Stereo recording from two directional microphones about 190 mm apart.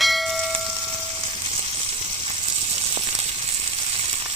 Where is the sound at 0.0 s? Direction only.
Centre (ahead or behind).